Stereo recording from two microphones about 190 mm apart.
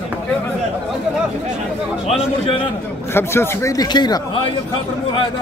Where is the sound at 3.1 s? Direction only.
10° left (ahead or behind).